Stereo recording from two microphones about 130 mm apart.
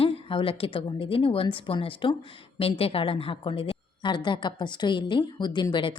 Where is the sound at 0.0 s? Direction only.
45° left (ahead or behind).